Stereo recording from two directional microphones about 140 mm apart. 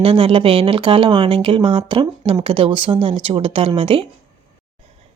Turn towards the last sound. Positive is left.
turn(degrees=-40)  # may be behind; listen again after turning